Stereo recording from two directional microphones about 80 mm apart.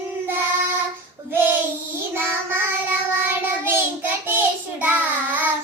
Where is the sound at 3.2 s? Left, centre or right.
Right.